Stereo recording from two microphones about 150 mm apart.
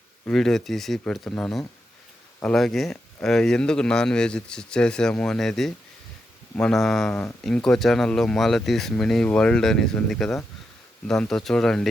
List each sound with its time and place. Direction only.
0.3 s speech: 5° left (ahead or behind)